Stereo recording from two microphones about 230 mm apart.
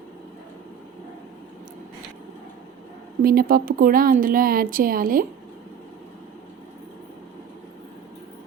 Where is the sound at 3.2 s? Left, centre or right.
Right.